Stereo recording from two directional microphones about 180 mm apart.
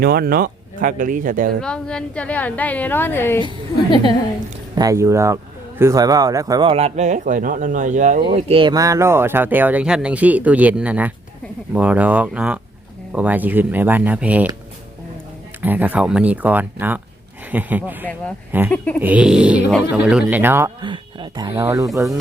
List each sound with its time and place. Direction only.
0.0 s speech: 55° right (ahead or behind)
1.6 s a woman's voice: 5° left (ahead or behind)
4.7 s speech: 20° right (ahead or behind)
15.6 s speech: 10° right (ahead or behind)
20.8 s speech: 25° right (ahead or behind)
21.5 s speech: 15° right (ahead or behind)